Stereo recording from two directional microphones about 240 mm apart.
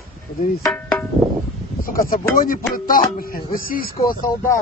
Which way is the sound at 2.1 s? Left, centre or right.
Left.